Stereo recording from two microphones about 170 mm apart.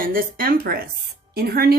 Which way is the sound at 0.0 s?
55° right (ahead or behind).